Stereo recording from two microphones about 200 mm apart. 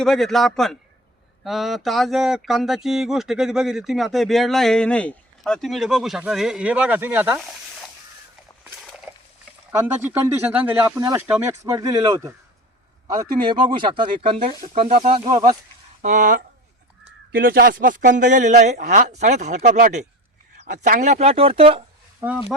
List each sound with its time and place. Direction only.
0.0 s speech: centre (ahead or behind)
9.1 s dog: 10° right (ahead or behind)
9.7 s speech: 10° right (ahead or behind)
16.0 s speech: 40° right (ahead or behind)
22.2 s speech: 10° right (ahead or behind)